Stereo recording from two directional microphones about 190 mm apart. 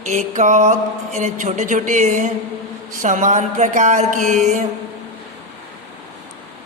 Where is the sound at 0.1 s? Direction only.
40° right (ahead or behind).